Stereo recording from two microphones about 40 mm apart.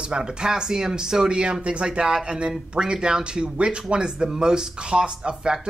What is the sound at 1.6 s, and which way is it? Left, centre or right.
Speech, right.